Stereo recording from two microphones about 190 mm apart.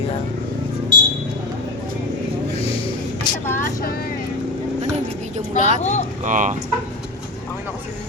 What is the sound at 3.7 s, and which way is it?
Speech, 50° left (ahead or behind).